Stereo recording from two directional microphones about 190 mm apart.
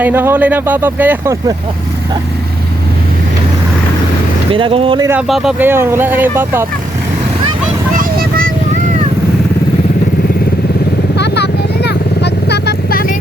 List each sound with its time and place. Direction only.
0.0 s speech: 10° right (ahead or behind)
4.5 s speech: 30° right (ahead or behind)
5.3 s speech: 5° right (ahead or behind)
11.2 s vehicle: 60° left (ahead or behind)